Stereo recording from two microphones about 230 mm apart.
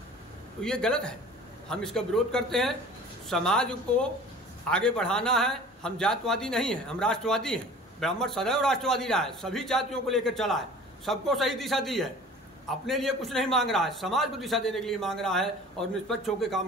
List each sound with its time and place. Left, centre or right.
0.7 s a man's voice: centre